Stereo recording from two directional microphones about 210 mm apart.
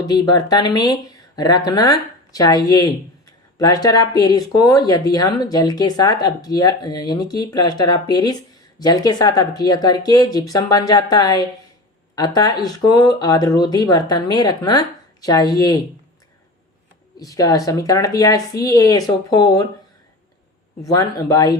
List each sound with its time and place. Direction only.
0.0 s speech: 20° left (ahead or behind)
17.2 s speech: 15° left (ahead or behind)
20.8 s speech: 15° left (ahead or behind)